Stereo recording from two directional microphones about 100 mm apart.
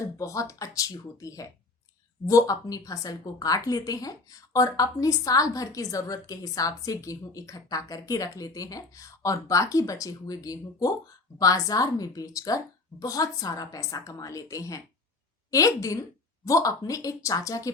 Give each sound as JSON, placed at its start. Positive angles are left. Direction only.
{"t": 0.0, "sound": "a woman's voice", "side_deg": 30}